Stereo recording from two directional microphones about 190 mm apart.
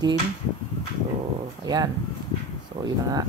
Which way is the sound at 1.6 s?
20° right (ahead or behind).